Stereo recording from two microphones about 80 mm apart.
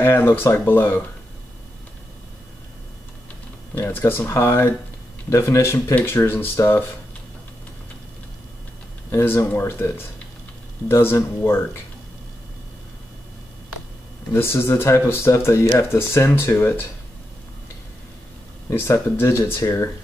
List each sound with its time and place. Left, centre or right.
0.0 s speech: left
3.7 s speech: left
9.1 s speech: left
14.3 s speech: left
18.7 s speech: left